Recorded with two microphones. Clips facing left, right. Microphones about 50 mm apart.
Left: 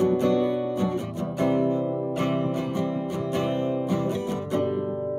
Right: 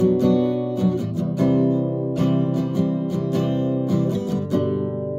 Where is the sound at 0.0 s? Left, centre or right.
Left.